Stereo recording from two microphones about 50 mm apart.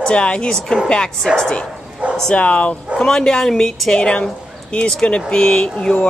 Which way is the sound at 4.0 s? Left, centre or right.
Centre.